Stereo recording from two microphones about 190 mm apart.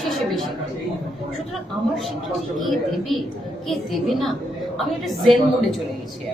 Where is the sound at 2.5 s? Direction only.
Centre (ahead or behind).